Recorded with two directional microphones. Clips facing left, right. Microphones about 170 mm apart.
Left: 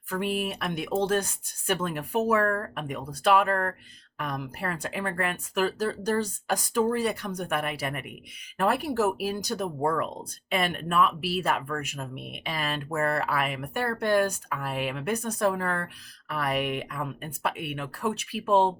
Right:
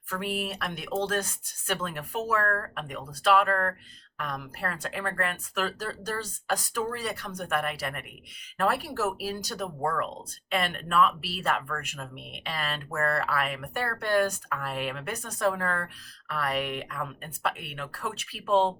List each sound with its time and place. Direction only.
0.1 s speech: 15° left (ahead or behind)